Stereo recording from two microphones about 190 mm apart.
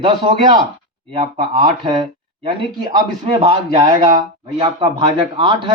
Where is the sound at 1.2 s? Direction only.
30° right (ahead or behind).